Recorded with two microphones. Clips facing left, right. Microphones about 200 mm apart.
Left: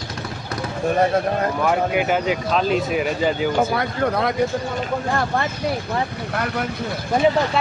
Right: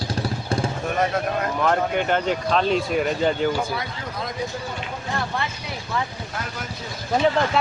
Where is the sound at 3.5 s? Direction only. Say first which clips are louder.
Left 7 dB; 55° left (ahead or behind).